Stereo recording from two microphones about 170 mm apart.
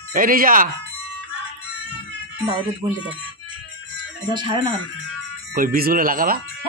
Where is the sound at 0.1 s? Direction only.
55° right (ahead or behind).